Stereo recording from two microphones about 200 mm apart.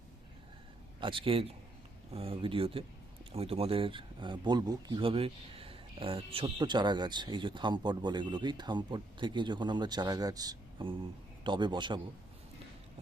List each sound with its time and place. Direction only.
0.9 s speech: 25° right (ahead or behind)